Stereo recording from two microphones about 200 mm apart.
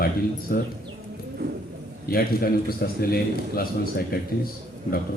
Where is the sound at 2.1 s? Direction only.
45° left (ahead or behind).